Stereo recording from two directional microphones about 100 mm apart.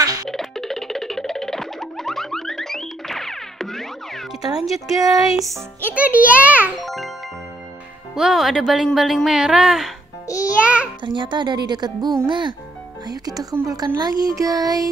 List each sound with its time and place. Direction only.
0.0 s music: 40° right (ahead or behind)
0.3 s music: 5° left (ahead or behind)
4.6 s speech: centre (ahead or behind)
5.8 s a child's voice: 15° right (ahead or behind)
6.8 s music: centre (ahead or behind)
8.2 s speech: centre (ahead or behind)
10.2 s music: 30° left (ahead or behind)
10.6 s a sound: 15° right (ahead or behind)
11.1 s a woman's voice: 50° right (ahead or behind)